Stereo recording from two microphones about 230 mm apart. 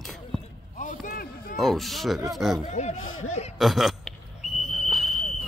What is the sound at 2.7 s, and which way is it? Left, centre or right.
Speech, left.